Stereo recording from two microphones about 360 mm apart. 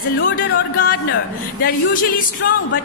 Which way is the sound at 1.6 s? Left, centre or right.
Left.